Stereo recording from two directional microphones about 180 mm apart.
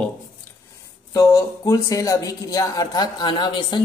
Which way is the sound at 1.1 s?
20° left (ahead or behind).